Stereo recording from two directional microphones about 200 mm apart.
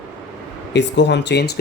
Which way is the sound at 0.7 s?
60° left (ahead or behind).